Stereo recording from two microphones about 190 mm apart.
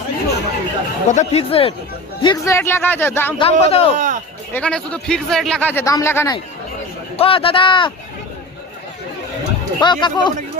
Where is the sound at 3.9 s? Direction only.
40° right (ahead or behind).